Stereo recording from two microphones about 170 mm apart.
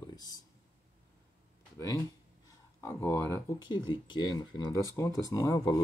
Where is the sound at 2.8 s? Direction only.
15° left (ahead or behind).